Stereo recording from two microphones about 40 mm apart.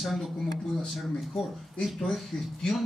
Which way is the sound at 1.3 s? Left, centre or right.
Centre.